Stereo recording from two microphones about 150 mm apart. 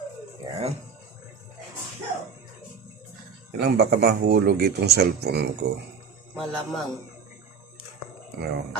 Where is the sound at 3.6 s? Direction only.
90° right.